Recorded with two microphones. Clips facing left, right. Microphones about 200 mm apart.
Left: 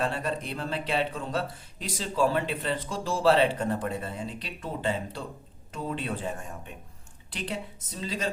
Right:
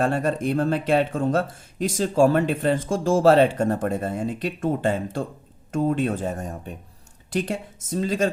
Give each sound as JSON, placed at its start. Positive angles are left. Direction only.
{"t": 0.0, "sound": "speech", "side_deg": -45}